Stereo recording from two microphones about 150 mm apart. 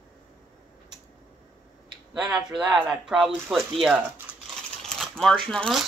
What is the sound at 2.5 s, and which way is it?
Speech, 30° right (ahead or behind).